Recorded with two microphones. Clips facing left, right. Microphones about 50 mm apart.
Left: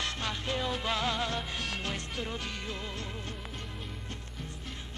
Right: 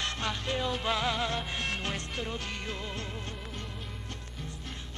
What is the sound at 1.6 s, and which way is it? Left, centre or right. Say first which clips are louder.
Music: right 2 dB; right.